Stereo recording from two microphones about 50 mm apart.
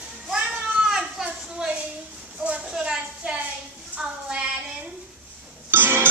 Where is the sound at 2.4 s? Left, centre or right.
Right.